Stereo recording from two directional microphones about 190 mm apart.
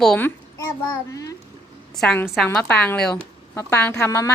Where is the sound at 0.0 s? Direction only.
5° left (ahead or behind).